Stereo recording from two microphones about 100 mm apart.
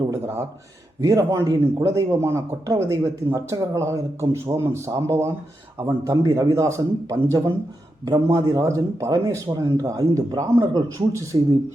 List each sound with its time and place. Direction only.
1.0 s speech: 35° right (ahead or behind)